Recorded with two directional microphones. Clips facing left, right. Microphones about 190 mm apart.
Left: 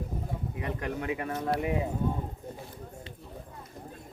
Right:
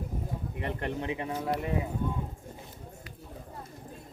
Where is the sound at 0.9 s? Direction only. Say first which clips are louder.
Left 1 dB; 25° right (ahead or behind).